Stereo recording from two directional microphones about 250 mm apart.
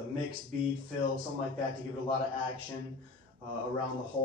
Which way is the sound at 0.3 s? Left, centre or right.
Right.